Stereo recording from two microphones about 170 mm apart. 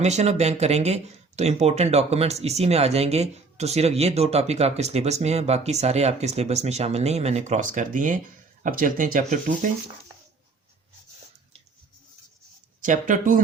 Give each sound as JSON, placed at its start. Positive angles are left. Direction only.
{"t": 0.0, "sound": "speech", "side_deg": -40}
{"t": 12.8, "sound": "speech", "side_deg": -50}